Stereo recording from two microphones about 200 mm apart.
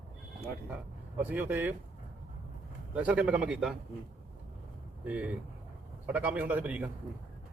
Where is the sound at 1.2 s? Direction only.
10° right (ahead or behind).